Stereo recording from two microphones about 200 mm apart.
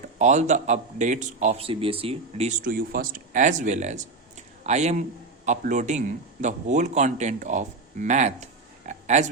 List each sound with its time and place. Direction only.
0.2 s a man's voice: 35° right (ahead or behind)
2.6 s a man's voice: 45° right (ahead or behind)
8.9 s a sound: 35° right (ahead or behind)